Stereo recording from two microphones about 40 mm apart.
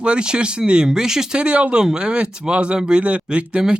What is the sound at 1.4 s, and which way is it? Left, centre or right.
Speech, right.